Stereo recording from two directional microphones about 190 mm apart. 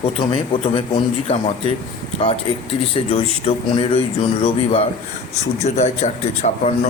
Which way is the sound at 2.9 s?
30° left (ahead or behind).